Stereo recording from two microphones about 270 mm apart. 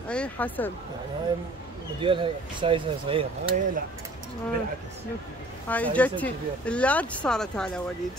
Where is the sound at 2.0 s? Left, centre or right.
Centre.